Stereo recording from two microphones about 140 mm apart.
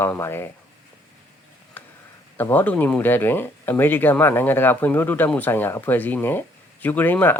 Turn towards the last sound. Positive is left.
turn(degrees=15)  # may be behind; listen again after turning